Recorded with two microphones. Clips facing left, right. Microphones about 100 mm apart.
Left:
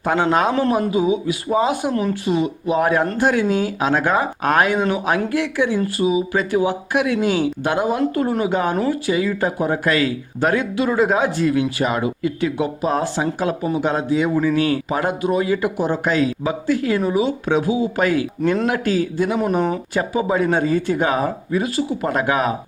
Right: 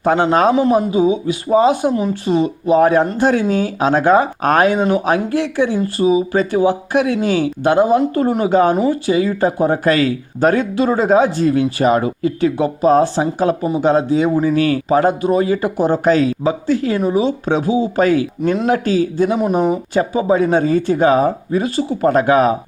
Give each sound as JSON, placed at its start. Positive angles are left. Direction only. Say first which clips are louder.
{"t": 0.0, "sound": "speech", "louder": "right 4 dB", "side_deg": -30}
{"t": 0.5, "sound": "speech", "louder": "right 5 dB", "side_deg": -10}
{"t": 0.9, "sound": "speech", "louder": "right 3 dB", "side_deg": -30}
{"t": 1.9, "sound": "speech", "louder": "right 3 dB", "side_deg": -10}
{"t": 2.2, "sound": "speech", "louder": "right 4 dB", "side_deg": -35}
{"t": 19.9, "sound": "speech", "louder": "right 5 dB", "side_deg": -30}